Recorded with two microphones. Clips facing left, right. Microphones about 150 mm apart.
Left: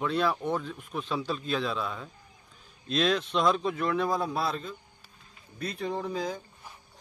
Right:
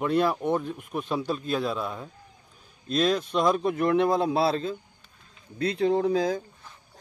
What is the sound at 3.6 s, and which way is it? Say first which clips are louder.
Speech: right 5 dB; 55° right (ahead or behind).